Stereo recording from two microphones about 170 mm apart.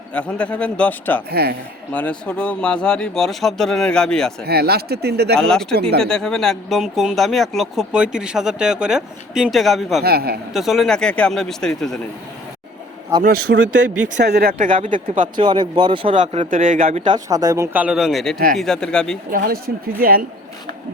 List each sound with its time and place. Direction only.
0.1 s a man's voice: 10° left (ahead or behind)
1.3 s speech: 65° right (ahead or behind)
1.9 s speech: 10° left (ahead or behind)
4.4 s speech: 65° right (ahead or behind)
5.4 s speech: 5° left (ahead or behind)
10.0 s speech: 65° right (ahead or behind)
10.5 s speech: centre (ahead or behind)
13.2 s speech: 65° right (ahead or behind)
14.6 s speech: 50° right (ahead or behind)
15.4 s speech: 30° right (ahead or behind)
16.1 s speech: 45° right (ahead or behind)
17.1 s speech: 20° right (ahead or behind)
17.8 s speech: 5° right (ahead or behind)
19.3 s speech: 55° right (ahead or behind)